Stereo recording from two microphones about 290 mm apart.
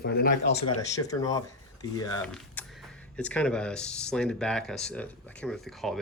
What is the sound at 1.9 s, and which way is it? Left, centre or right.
Speech, centre.